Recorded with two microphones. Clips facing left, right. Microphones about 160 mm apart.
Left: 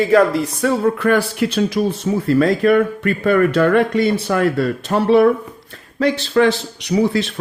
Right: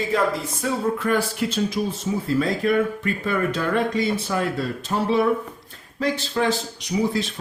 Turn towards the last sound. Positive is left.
turn(degrees=70)  # may be behind; listen again after turning